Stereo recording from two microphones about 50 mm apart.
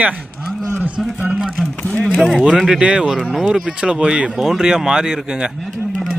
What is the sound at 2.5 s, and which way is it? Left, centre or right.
Speech, centre.